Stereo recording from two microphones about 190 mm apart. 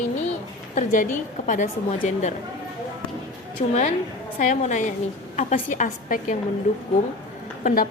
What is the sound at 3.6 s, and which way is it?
A woman's voice, 35° left (ahead or behind).